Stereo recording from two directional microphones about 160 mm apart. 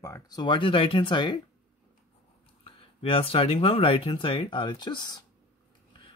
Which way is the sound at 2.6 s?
35° left (ahead or behind).